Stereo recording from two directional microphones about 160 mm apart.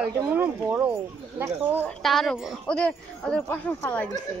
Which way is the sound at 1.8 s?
Centre (ahead or behind).